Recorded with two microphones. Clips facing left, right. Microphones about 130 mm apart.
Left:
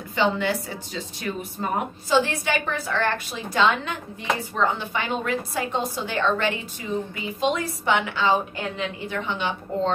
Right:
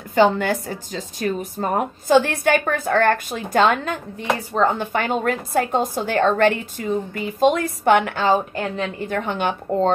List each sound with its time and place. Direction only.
0.1 s a woman's voice: 45° right (ahead or behind)